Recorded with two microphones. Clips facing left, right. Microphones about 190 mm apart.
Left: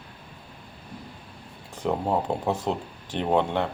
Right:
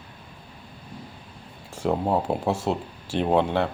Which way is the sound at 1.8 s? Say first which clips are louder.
Right 2 dB; 10° right (ahead or behind).